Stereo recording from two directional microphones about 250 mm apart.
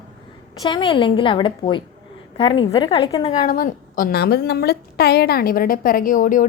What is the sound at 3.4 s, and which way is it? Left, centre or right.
A woman's voice, left.